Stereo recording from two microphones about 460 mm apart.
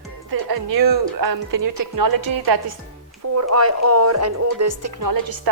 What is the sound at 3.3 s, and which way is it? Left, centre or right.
Speech, right.